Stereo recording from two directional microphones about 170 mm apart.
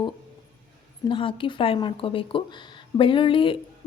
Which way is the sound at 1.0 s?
30° left (ahead or behind).